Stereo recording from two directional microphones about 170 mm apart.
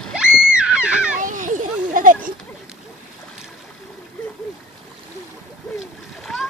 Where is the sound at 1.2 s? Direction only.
50° right (ahead or behind).